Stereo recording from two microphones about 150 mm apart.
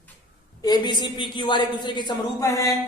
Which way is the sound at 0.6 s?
30° left (ahead or behind).